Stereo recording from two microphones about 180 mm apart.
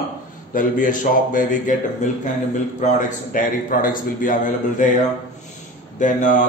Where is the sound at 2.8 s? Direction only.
45° left (ahead or behind).